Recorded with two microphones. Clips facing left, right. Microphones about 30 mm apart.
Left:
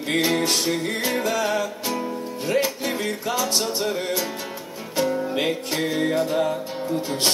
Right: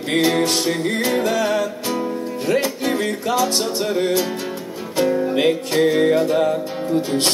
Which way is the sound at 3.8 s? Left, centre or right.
Centre.